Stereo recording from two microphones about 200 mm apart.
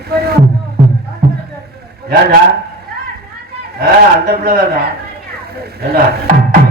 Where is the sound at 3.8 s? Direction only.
50° right (ahead or behind).